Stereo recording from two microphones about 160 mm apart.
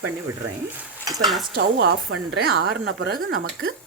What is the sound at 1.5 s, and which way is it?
A woman's voice, 85° right.